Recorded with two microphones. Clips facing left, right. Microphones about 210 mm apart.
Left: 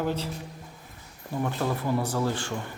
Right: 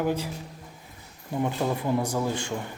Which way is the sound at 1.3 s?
15° right (ahead or behind).